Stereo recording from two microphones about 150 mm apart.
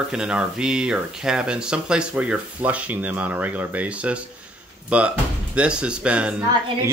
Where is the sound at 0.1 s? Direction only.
5° right (ahead or behind).